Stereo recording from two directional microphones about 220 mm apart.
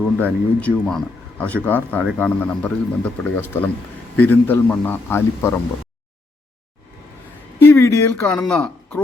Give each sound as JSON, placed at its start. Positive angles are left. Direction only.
{"t": 0.2, "sound": "speech", "side_deg": 5}
{"t": 7.6, "sound": "speech", "side_deg": 10}